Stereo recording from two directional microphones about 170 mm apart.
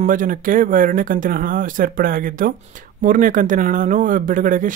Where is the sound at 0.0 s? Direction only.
50° right (ahead or behind).